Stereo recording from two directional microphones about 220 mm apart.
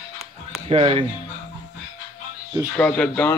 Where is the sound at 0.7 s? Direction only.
25° right (ahead or behind).